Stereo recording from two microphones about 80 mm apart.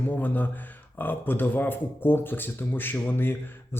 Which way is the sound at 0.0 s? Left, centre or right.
Left.